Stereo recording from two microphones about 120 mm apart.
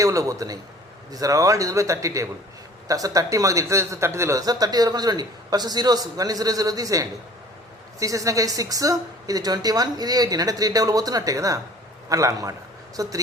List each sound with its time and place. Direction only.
0.0 s speech: 25° right (ahead or behind)